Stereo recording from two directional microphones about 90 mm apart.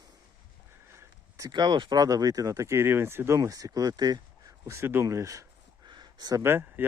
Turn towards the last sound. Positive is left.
turn(degrees=-25)  # may be behind; listen again after turning